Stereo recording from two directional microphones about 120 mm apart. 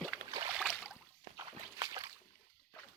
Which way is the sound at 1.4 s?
30° right (ahead or behind).